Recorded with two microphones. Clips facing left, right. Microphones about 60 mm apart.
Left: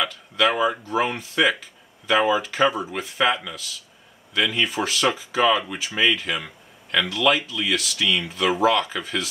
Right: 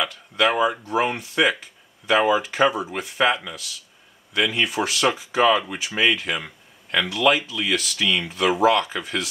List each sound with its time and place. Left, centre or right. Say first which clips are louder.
0.4 s speech: right 1 dB; centre
5.6 s speech: even; centre